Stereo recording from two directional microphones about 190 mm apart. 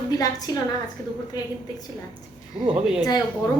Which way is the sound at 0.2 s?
20° left (ahead or behind).